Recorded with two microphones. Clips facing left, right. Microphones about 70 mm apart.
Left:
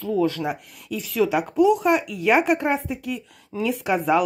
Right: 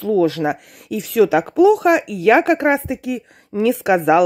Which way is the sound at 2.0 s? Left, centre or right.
Right.